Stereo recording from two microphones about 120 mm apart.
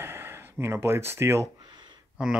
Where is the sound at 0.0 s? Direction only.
20° right (ahead or behind).